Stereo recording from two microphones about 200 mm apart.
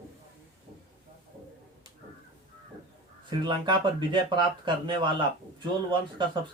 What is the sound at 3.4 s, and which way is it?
Speech, 25° right (ahead or behind).